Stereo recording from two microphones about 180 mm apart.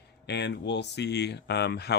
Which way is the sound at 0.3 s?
70° left (ahead or behind).